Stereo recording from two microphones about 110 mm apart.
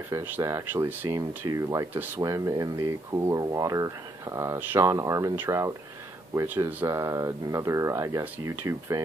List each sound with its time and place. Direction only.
0.1 s speech: 20° right (ahead or behind)
1.0 s speech: 30° right (ahead or behind)
2.0 s speech: 20° right (ahead or behind)
2.2 s speech: 30° right (ahead or behind)
3.3 s speech: 35° right (ahead or behind)